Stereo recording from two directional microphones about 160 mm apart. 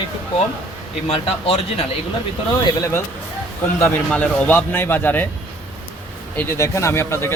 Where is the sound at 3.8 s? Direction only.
10° left (ahead or behind).